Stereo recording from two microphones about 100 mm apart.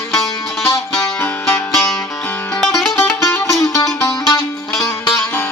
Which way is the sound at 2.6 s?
5° left (ahead or behind).